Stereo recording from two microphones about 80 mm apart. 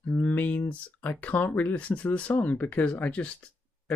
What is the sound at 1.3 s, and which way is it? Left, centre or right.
Speech, left.